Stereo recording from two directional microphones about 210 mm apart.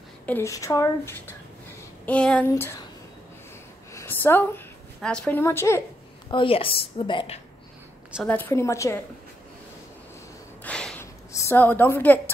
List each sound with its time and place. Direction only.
0.3 s speech: 15° left (ahead or behind)
3.9 s a sound: 10° left (ahead or behind)
5.0 s speech: 5° left (ahead or behind)
6.3 s a woman's voice: 25° left (ahead or behind)
8.1 s speech: 5° left (ahead or behind)
10.6 s a sound: 5° left (ahead or behind)
11.3 s speech: 10° left (ahead or behind)